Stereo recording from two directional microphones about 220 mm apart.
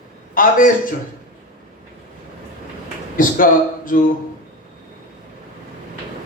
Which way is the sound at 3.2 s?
40° left (ahead or behind).